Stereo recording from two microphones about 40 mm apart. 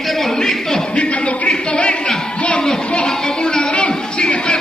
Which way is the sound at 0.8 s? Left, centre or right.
Left.